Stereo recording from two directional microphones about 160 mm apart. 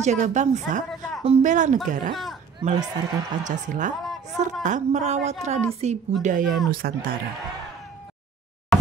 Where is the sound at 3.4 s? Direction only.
50° right (ahead or behind).